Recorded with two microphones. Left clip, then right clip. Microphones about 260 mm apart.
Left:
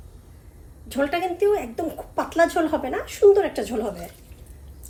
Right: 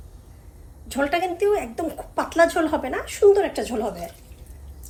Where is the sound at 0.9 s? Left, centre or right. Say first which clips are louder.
Right 1 dB; centre.